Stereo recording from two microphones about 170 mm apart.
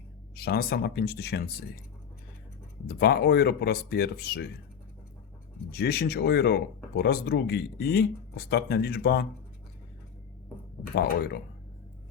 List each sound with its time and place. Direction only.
0.3 s speech: 65° left (ahead or behind)
2.8 s speech: 70° left (ahead or behind)
5.7 s speech: 70° left (ahead or behind)